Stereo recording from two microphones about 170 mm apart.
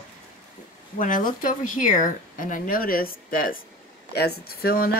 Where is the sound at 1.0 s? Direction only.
50° left (ahead or behind).